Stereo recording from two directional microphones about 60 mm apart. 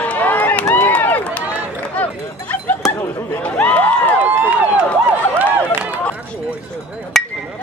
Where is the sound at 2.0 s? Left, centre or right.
Left.